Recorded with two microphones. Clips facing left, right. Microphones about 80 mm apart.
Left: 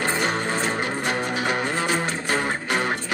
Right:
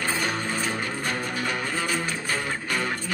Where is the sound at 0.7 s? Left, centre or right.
Left.